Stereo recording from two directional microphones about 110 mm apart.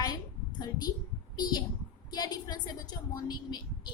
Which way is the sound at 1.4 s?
40° left (ahead or behind).